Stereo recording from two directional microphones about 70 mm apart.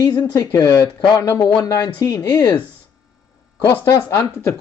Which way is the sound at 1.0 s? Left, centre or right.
Left.